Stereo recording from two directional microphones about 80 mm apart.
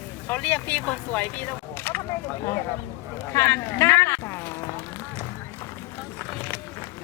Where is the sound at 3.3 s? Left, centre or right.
Left.